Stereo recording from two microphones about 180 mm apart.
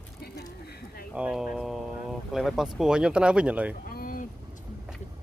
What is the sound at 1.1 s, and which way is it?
Speech, 5° right (ahead or behind).